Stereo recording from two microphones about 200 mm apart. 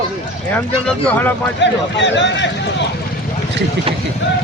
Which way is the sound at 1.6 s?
65° left (ahead or behind).